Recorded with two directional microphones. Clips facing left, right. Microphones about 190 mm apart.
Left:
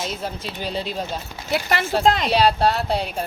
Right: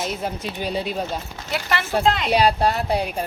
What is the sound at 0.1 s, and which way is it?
Speech, 50° right (ahead or behind).